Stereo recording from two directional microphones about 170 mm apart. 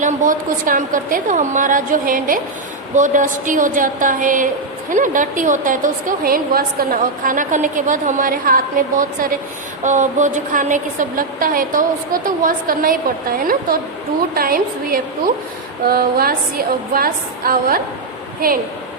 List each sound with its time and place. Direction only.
0.0 s a woman's voice: 50° right (ahead or behind)
14.3 s a woman's voice: 60° right (ahead or behind)